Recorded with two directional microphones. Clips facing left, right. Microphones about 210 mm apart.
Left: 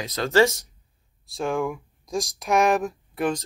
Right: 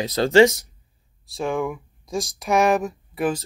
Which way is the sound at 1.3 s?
Centre (ahead or behind).